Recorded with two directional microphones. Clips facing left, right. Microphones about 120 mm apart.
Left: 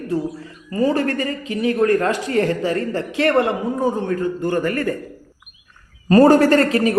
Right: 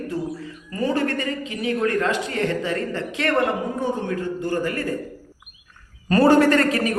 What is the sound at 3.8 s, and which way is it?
A man's voice, 50° left (ahead or behind).